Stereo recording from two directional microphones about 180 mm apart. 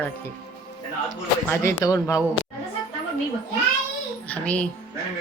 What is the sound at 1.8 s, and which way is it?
Speech, 20° left (ahead or behind).